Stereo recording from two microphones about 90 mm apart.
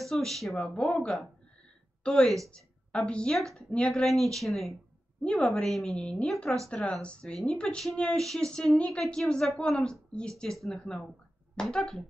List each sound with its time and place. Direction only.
0.0 s speech: 5° left (ahead or behind)